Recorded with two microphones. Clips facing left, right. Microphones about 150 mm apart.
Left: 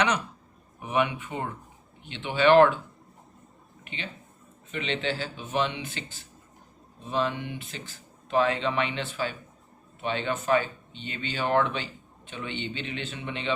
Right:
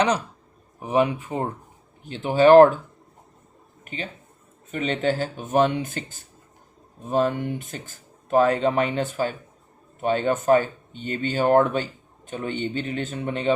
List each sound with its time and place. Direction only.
0.8 s speech: 35° right (ahead or behind)
3.8 s speech: 40° right (ahead or behind)